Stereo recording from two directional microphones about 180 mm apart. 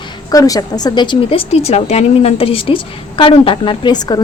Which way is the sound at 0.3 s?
20° left (ahead or behind).